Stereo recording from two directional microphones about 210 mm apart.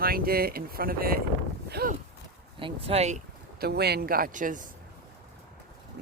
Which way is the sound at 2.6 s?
25° right (ahead or behind).